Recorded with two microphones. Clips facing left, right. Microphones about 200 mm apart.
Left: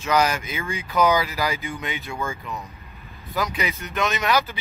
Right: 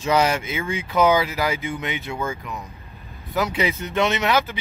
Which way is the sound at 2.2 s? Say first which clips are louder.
Right 2 dB; centre (ahead or behind).